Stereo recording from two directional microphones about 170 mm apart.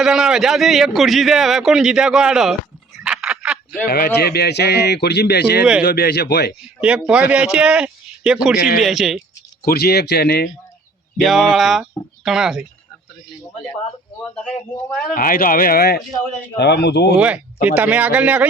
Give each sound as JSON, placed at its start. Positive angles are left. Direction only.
{"t": 0.0, "sound": "a man's voice", "side_deg": -5}
{"t": 3.0, "sound": "a sound", "side_deg": -5}
{"t": 3.8, "sound": "speech", "side_deg": 65}
{"t": 6.8, "sound": "a man's voice", "side_deg": -5}
{"t": 9.6, "sound": "speech", "side_deg": 65}
{"t": 11.2, "sound": "a man's voice", "side_deg": 0}
{"t": 15.1, "sound": "speech", "side_deg": 55}
{"t": 16.6, "sound": "speech", "side_deg": 80}
{"t": 17.2, "sound": "speech", "side_deg": -10}